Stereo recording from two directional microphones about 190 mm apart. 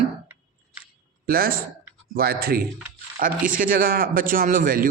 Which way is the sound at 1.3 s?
50° right (ahead or behind).